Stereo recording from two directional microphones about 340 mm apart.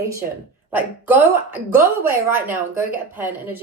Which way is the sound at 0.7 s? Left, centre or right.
Centre.